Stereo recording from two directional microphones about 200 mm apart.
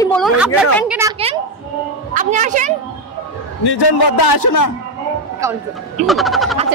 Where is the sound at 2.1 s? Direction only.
40° right (ahead or behind).